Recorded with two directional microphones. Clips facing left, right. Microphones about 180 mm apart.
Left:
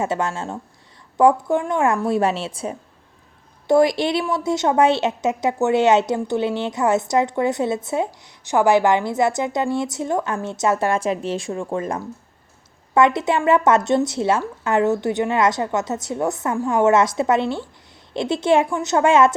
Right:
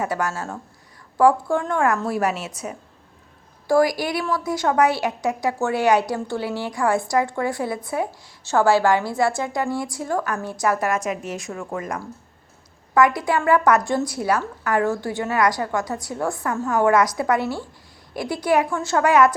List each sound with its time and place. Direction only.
0.0 s a woman's voice: 25° left (ahead or behind)